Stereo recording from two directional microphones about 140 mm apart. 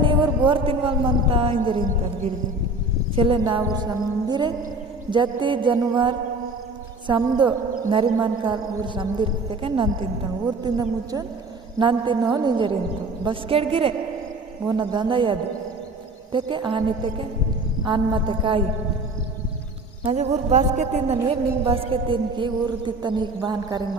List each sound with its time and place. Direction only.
0.0 s speech: 35° right (ahead or behind)
3.2 s a woman's voice: 40° right (ahead or behind)
10.6 s speech: 25° right (ahead or behind)
11.8 s a woman's voice: 35° right (ahead or behind)
20.1 s a man's voice: 50° right (ahead or behind)
21.7 s a woman's voice: 40° right (ahead or behind)